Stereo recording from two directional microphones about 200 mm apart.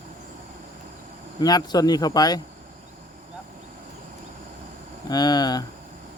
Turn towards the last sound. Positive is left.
turn(degrees=20)  # may be behind; listen again after turning